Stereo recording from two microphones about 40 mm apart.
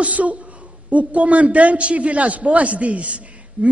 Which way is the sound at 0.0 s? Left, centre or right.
Right.